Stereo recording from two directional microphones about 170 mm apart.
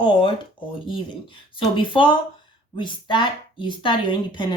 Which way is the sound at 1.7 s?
30° left (ahead or behind).